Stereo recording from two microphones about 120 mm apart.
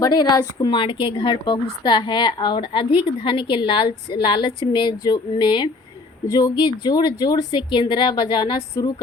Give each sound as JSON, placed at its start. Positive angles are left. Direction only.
{"t": 0.0, "sound": "speech", "side_deg": 35}